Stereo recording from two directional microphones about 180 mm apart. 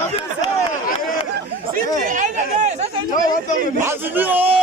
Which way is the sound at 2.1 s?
45° right (ahead or behind).